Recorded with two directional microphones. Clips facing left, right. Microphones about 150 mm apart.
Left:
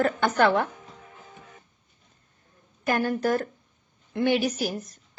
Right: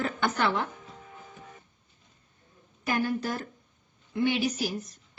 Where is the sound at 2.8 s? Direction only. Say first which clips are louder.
Left 4 dB; 50° left (ahead or behind).